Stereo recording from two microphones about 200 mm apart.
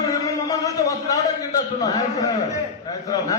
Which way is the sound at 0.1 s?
15° left (ahead or behind).